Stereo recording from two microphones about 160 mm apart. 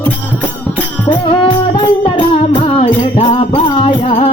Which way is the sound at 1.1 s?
35° left (ahead or behind).